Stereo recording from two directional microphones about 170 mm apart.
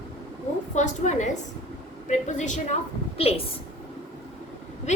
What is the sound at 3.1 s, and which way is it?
Speech, 35° left (ahead or behind).